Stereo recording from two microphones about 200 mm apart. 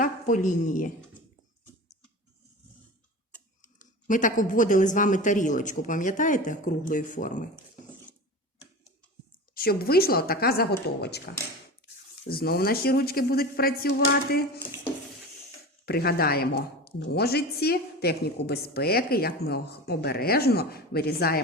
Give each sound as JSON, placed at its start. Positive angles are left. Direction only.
{"t": 0.0, "sound": "a woman's voice", "side_deg": 40}
{"t": 3.8, "sound": "speech", "side_deg": 40}
{"t": 9.6, "sound": "speech", "side_deg": 50}
{"t": 14.0, "sound": "a sound", "side_deg": 55}
{"t": 15.9, "sound": "speech", "side_deg": 50}